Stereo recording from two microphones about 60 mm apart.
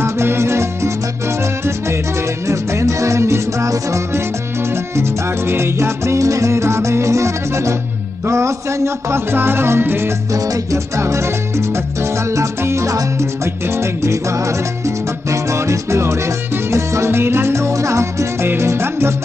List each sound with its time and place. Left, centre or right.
0.0 s music: right
2.4 s music: right
5.5 s music: right
10.3 s music: right
11.0 s music: right